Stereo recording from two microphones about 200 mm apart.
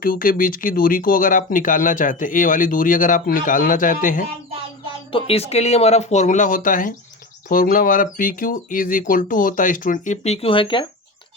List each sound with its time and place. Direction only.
0.0 s speech: 45° left (ahead or behind)
5.1 s speech: 30° left (ahead or behind)